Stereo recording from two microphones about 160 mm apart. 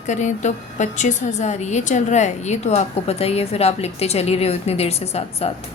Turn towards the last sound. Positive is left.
turn(degrees=40)  # may be behind; listen again after turning